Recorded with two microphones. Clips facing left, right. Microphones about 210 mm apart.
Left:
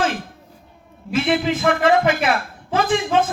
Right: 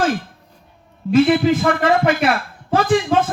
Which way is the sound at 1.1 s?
40° right (ahead or behind).